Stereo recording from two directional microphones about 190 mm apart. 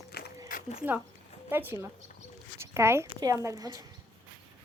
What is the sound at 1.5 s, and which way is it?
A woman's voice, 10° right (ahead or behind).